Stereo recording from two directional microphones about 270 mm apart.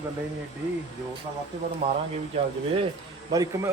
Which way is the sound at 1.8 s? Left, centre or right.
Right.